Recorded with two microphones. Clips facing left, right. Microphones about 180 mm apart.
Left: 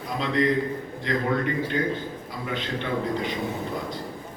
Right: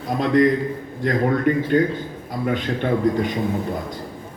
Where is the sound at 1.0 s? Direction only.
50° right (ahead or behind).